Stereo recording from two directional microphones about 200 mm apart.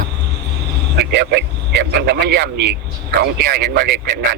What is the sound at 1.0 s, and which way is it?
Speech, 60° right (ahead or behind).